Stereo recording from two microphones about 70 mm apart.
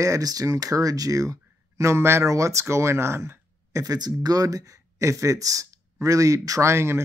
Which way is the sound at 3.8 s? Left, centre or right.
Right.